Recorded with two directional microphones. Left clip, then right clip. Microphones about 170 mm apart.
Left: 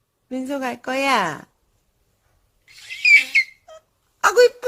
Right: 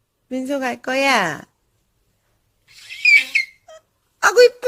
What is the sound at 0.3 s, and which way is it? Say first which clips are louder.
A woman's voice: right 3 dB; 10° right (ahead or behind).